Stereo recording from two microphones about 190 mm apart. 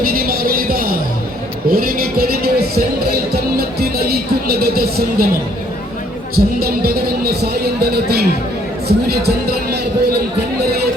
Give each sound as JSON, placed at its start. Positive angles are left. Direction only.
{"t": 0.1, "sound": "music", "side_deg": -50}
{"t": 6.3, "sound": "speech", "side_deg": -55}